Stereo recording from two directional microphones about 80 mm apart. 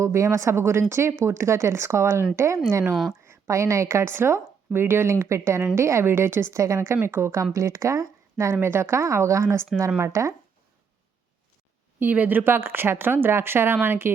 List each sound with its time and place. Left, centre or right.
0.0 s a woman's voice: right
11.9 s speech: right